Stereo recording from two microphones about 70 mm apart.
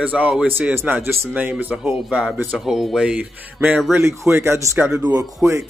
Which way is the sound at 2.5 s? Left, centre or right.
Centre.